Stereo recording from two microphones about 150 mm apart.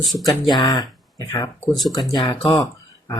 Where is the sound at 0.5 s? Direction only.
25° left (ahead or behind).